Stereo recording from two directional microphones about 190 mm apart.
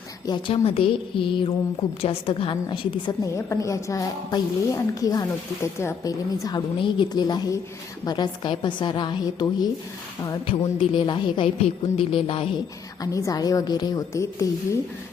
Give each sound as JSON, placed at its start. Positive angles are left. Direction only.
{"t": 0.3, "sound": "a woman's voice", "side_deg": 30}
{"t": 13.0, "sound": "a woman's voice", "side_deg": 20}